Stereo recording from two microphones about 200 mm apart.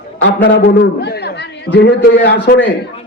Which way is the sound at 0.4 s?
60° left (ahead or behind).